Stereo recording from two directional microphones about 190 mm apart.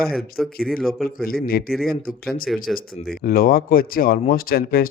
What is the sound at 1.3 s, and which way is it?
Speech, 50° left (ahead or behind).